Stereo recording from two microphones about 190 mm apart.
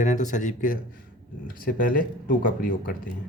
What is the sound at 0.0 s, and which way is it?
Speech, 40° left (ahead or behind).